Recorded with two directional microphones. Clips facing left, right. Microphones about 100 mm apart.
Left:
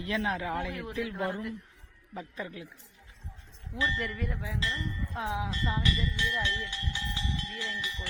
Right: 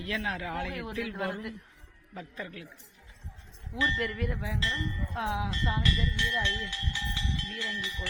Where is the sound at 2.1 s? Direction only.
10° left (ahead or behind).